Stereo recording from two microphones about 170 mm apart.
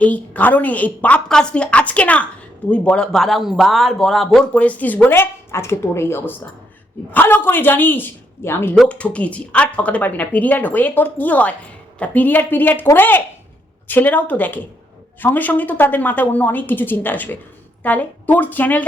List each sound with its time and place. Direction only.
0.0 s speech: 10° left (ahead or behind)